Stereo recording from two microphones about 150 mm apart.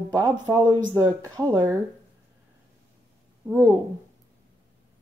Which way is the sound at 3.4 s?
15° right (ahead or behind).